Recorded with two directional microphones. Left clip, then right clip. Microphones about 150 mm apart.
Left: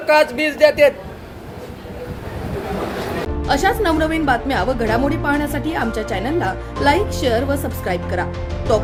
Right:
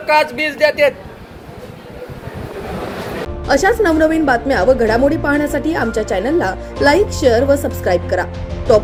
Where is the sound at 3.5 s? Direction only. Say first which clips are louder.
Right 4 dB; 5° left (ahead or behind).